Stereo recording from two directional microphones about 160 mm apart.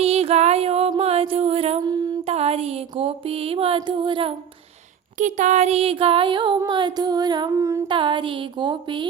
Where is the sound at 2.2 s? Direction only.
40° right (ahead or behind).